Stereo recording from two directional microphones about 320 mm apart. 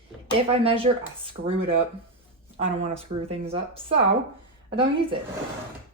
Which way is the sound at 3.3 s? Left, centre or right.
Centre.